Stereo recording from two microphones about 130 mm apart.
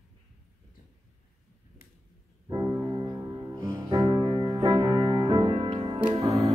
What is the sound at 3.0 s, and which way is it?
Music, 25° right (ahead or behind).